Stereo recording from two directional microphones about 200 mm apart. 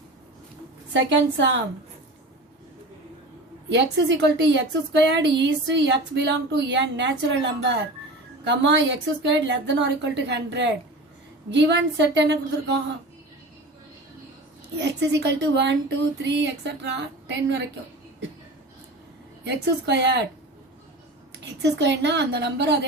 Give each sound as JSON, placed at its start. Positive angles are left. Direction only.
{"t": 0.9, "sound": "speech", "side_deg": -65}
{"t": 3.7, "sound": "speech", "side_deg": -65}
{"t": 14.8, "sound": "speech", "side_deg": -60}
{"t": 19.5, "sound": "speech", "side_deg": -60}
{"t": 21.3, "sound": "speech", "side_deg": -60}